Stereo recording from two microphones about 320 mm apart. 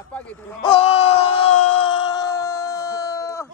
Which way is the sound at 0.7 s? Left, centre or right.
Centre.